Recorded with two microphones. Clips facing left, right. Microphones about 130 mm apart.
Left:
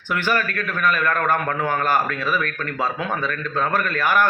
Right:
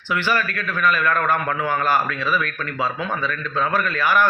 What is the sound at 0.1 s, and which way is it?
A man's voice, 50° left (ahead or behind).